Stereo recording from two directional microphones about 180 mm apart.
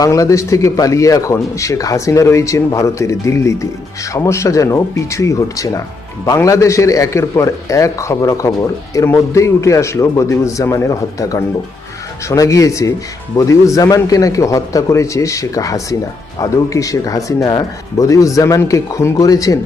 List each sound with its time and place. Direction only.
0.0 s a man's voice: 20° left (ahead or behind)